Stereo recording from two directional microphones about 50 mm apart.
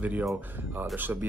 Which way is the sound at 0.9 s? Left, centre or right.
Right.